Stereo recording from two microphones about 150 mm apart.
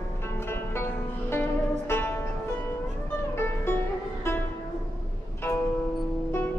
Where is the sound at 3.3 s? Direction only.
15° left (ahead or behind).